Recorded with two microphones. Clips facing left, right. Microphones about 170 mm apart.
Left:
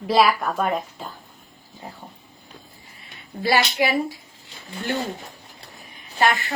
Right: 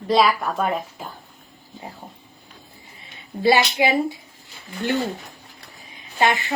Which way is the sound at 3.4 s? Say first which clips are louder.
Right 3 dB; 20° right (ahead or behind).